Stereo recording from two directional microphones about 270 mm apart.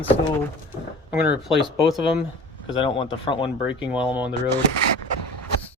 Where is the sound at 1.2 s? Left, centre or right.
Centre.